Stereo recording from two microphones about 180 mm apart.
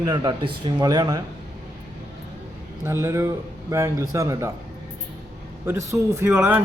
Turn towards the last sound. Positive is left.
turn(degrees=-10)  # may be behind; listen again after turning